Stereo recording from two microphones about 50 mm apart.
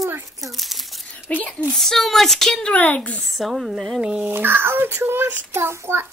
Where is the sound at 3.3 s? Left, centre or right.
Centre.